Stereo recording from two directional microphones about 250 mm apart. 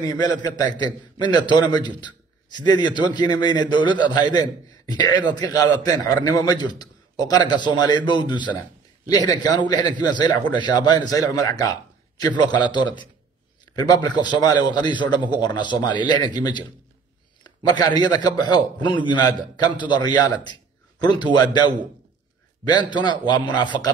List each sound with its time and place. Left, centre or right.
0.0 s a man's voice: centre